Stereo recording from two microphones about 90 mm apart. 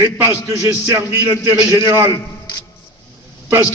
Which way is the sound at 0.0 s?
25° right (ahead or behind).